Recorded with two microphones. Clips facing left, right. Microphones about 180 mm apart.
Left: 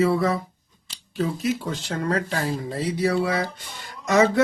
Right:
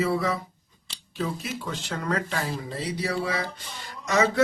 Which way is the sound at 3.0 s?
55° left (ahead or behind).